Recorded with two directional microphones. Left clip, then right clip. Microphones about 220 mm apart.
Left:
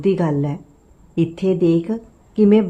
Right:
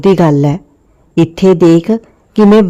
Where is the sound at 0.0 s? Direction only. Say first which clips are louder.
Right 10 dB; 50° right (ahead or behind).